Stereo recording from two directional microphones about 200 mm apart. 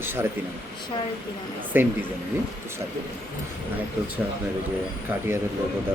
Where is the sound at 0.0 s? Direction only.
10° right (ahead or behind).